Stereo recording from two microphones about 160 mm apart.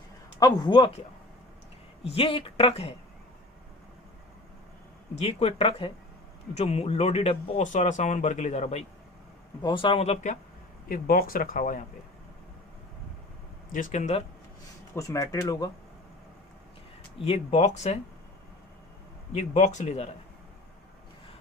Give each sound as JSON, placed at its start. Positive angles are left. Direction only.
{"t": 0.3, "sound": "speech", "side_deg": 25}
{"t": 2.0, "sound": "speech", "side_deg": 35}
{"t": 5.2, "sound": "speech", "side_deg": 40}
{"t": 7.6, "sound": "speech", "side_deg": 50}
{"t": 9.6, "sound": "speech", "side_deg": 30}
{"t": 10.8, "sound": "speech", "side_deg": 60}
{"t": 13.7, "sound": "speech", "side_deg": 50}
{"t": 14.9, "sound": "speech", "side_deg": 20}
{"t": 17.2, "sound": "speech", "side_deg": 40}
{"t": 19.3, "sound": "speech", "side_deg": 45}